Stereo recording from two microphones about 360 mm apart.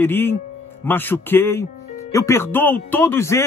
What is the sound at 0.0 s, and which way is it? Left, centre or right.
Speech, centre.